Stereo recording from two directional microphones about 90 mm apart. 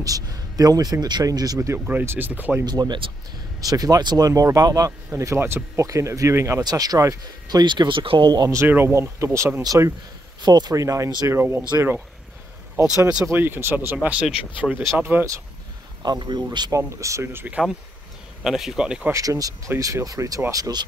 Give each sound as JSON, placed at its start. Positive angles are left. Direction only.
{"t": 0.0, "sound": "speech", "side_deg": -40}
{"t": 1.9, "sound": "speech", "side_deg": -20}
{"t": 2.6, "sound": "speech", "side_deg": -50}
{"t": 6.6, "sound": "speech", "side_deg": -45}
{"t": 7.6, "sound": "speech", "side_deg": -60}
{"t": 8.3, "sound": "speech", "side_deg": -45}
{"t": 8.5, "sound": "speech", "side_deg": -25}
{"t": 10.4, "sound": "speech", "side_deg": -50}
{"t": 12.8, "sound": "speech", "side_deg": -30}
{"t": 16.0, "sound": "speech", "side_deg": -50}
{"t": 16.7, "sound": "speech", "side_deg": -35}
{"t": 18.4, "sound": "speech", "side_deg": -5}
{"t": 19.1, "sound": "speech", "side_deg": -40}